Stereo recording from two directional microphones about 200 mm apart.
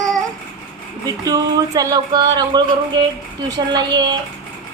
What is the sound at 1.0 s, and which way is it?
Speech, 20° right (ahead or behind).